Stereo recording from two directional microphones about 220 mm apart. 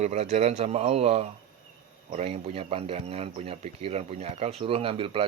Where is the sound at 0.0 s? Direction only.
30° right (ahead or behind).